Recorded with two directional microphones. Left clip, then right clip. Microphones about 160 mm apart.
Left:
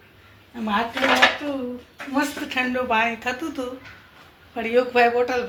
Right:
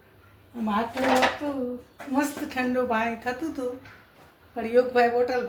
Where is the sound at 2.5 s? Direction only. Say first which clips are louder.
Left 5 dB; 20° left (ahead or behind).